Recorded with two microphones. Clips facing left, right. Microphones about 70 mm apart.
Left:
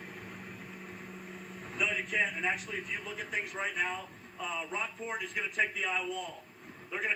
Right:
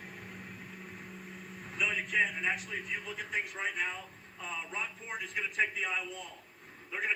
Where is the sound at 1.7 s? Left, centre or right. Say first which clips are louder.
Right 1 dB; centre.